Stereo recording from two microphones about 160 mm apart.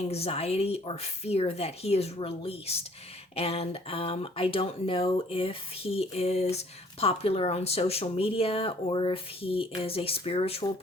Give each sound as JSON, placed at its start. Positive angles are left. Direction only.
{"t": 0.0, "sound": "speech", "side_deg": 40}